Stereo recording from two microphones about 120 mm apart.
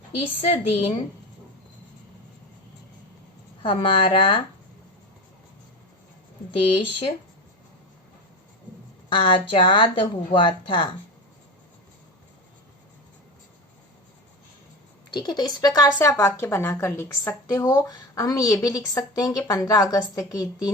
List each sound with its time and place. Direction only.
0.4 s speech: 55° left (ahead or behind)
3.6 s speech: 45° left (ahead or behind)
6.7 s speech: 45° left (ahead or behind)
9.0 s speech: 45° left (ahead or behind)
15.1 s a woman's voice: 35° left (ahead or behind)